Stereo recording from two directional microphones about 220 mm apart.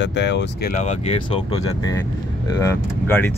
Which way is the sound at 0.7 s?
30° left (ahead or behind).